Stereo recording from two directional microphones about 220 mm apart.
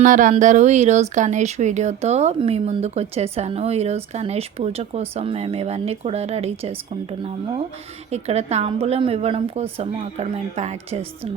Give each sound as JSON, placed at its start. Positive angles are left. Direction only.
{"t": 0.0, "sound": "speech", "side_deg": -35}